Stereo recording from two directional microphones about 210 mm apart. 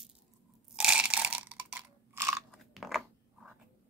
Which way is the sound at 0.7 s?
5° right (ahead or behind).